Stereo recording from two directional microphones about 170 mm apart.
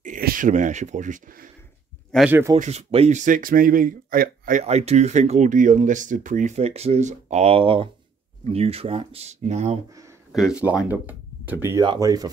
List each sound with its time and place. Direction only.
0.0 s speech: 55° right (ahead or behind)
2.1 s speech: 5° right (ahead or behind)
2.6 s speech: 35° right (ahead or behind)
10.3 s speech: 5° right (ahead or behind)
11.8 s speech: 25° right (ahead or behind)